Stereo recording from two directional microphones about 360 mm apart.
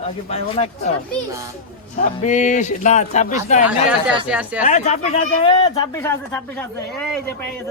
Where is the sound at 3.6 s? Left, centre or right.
Centre.